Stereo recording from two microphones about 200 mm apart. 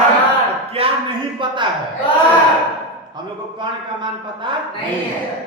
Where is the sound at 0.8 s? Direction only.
30° right (ahead or behind).